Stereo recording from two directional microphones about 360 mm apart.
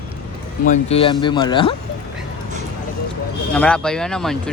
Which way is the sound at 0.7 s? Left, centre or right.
Centre.